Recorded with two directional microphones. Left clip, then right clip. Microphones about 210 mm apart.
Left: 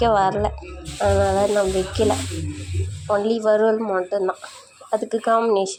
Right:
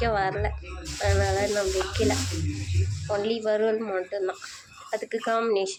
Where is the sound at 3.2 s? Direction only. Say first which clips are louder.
Left 7 dB; 20° left (ahead or behind).